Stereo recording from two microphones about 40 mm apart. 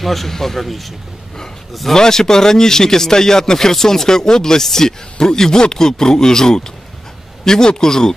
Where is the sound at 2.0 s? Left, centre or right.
Centre.